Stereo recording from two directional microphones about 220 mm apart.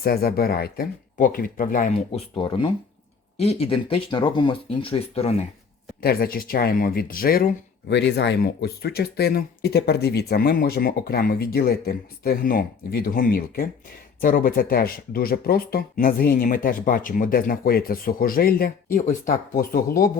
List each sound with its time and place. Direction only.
0.0 s speech: 45° left (ahead or behind)
2.3 s speech: 20° left (ahead or behind)
6.0 s speech: 45° left (ahead or behind)